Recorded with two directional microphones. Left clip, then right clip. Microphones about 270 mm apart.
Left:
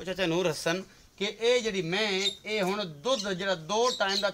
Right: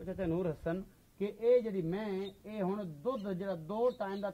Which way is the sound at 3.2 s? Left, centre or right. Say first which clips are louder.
Left 9 dB; left.